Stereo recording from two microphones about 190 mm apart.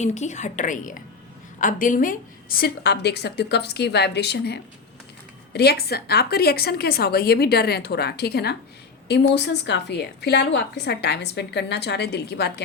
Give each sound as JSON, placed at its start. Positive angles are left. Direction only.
{"t": 0.0, "sound": "a woman's voice", "side_deg": 40}